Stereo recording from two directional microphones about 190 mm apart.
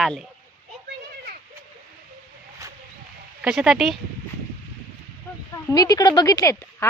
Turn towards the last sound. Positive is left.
turn(degrees=15)  # may be behind; listen again after turning